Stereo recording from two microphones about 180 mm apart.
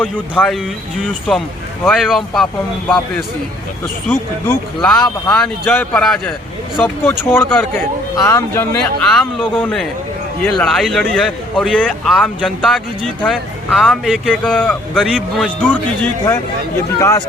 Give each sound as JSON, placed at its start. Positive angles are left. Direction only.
{"t": 0.0, "sound": "speech", "side_deg": 5}
{"t": 1.8, "sound": "speech", "side_deg": 0}
{"t": 4.1, "sound": "speech", "side_deg": 10}
{"t": 9.0, "sound": "speech", "side_deg": 5}